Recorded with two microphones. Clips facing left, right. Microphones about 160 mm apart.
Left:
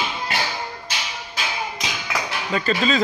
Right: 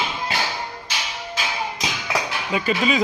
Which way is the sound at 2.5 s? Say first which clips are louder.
Even; 10° right (ahead or behind).